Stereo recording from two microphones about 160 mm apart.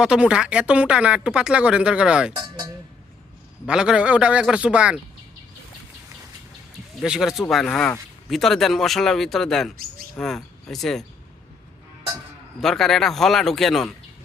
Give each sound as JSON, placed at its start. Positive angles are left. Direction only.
{"t": 0.0, "sound": "speech", "side_deg": -5}
{"t": 2.3, "sound": "speech", "side_deg": -25}
{"t": 3.7, "sound": "speech", "side_deg": -5}
{"t": 7.0, "sound": "speech", "side_deg": -5}
{"t": 12.5, "sound": "speech", "side_deg": 0}